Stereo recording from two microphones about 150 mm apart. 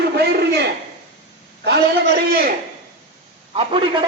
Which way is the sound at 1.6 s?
90° right.